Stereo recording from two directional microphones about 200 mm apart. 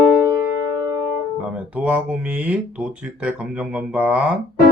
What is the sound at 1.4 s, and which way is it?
Speech, 5° right (ahead or behind).